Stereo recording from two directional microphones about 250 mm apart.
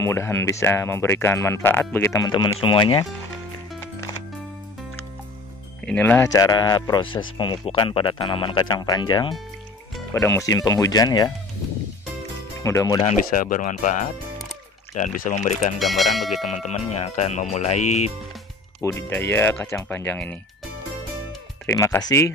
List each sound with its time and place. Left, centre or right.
0.0 s speech: centre
5.9 s speech: centre
10.1 s speech: centre
12.6 s speech: centre
13.3 s speech: left
15.8 s speech: centre
16.5 s speech: left
19.0 s speech: centre